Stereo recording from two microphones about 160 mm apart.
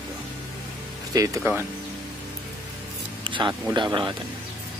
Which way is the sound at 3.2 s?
30° right (ahead or behind).